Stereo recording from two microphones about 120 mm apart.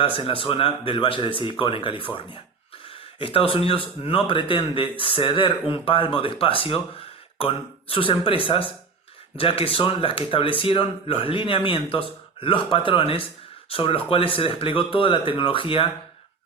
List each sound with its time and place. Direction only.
0.0 s speech: 50° left (ahead or behind)